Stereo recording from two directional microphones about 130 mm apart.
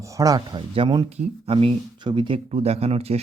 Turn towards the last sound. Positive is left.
turn(degrees=-50)  # may be behind; listen again after turning